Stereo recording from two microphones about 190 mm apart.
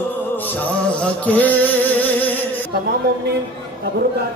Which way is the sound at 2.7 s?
55° right (ahead or behind).